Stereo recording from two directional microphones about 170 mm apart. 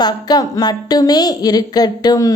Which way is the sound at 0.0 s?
25° left (ahead or behind).